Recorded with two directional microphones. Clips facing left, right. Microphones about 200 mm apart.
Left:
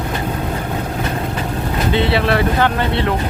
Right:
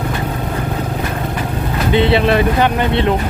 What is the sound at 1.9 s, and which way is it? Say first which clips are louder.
Speech: right 4 dB; 20° right (ahead or behind).